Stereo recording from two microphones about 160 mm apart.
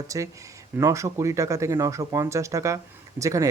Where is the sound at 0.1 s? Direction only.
20° right (ahead or behind).